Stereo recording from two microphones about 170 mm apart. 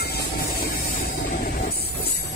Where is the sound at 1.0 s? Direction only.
65° left (ahead or behind).